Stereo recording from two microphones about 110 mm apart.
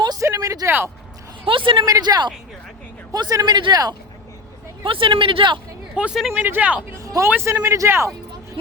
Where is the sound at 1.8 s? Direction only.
35° right (ahead or behind).